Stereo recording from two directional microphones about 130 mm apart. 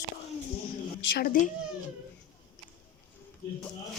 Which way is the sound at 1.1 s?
90° left.